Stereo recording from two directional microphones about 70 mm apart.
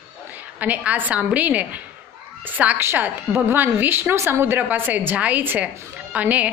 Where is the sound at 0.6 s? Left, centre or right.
Right.